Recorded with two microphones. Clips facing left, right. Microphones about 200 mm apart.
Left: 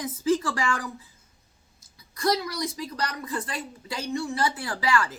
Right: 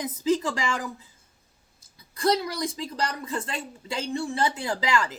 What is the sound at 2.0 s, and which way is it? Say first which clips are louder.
A woman's voice: right 2 dB; 30° right (ahead or behind).